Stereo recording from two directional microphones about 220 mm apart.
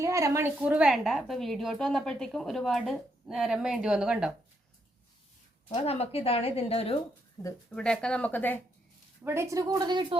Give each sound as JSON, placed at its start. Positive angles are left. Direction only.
{"t": 0.0, "sound": "a woman's voice", "side_deg": -15}
{"t": 5.6, "sound": "speech", "side_deg": 25}
{"t": 7.4, "sound": "a woman's voice", "side_deg": 5}
{"t": 9.2, "sound": "a woman's voice", "side_deg": -10}